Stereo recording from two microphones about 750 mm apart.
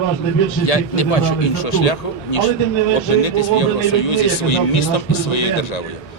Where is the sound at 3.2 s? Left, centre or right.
Left.